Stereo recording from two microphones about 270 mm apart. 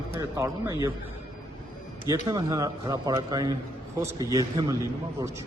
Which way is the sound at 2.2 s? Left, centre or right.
Centre.